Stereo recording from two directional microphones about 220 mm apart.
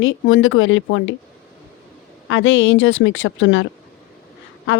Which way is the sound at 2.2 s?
60° left (ahead or behind).